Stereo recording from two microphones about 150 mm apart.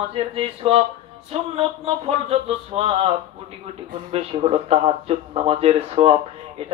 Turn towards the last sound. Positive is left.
turn(degrees=-40)  # may be behind; listen again after turning